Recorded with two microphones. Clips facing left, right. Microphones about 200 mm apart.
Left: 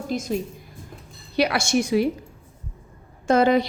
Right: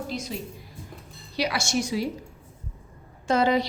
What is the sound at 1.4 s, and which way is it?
Speech, 55° left (ahead or behind).